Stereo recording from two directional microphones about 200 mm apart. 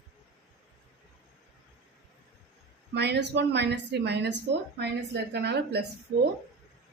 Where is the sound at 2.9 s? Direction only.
60° right (ahead or behind).